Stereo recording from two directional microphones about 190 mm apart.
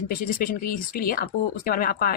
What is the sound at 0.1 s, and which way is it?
Speech, 50° left (ahead or behind).